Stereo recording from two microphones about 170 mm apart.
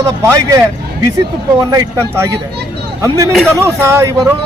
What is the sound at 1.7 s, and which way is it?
Speech, 20° right (ahead or behind).